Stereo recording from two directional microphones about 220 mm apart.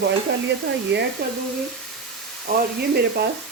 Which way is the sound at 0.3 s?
50° right (ahead or behind).